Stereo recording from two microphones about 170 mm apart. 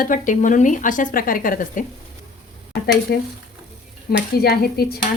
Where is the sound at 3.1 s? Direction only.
75° left (ahead or behind).